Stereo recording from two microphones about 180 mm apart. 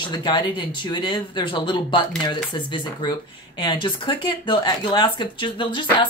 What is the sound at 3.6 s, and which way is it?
Speech, 25° left (ahead or behind).